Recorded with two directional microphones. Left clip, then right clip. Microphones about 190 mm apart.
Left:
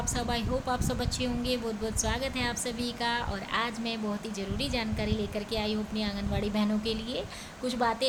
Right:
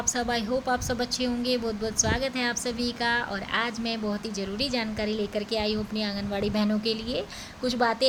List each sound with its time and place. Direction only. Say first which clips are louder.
0.2 s a woman's voice: right 3 dB; 20° right (ahead or behind)